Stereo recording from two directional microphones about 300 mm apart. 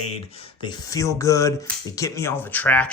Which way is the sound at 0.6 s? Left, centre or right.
Centre.